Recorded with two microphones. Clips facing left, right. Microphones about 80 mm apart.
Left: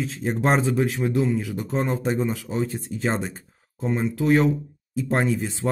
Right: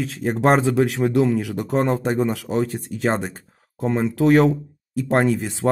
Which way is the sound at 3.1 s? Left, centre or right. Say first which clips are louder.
Right 4 dB; right.